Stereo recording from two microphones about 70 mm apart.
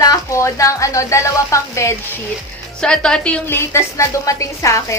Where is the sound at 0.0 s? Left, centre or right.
Left.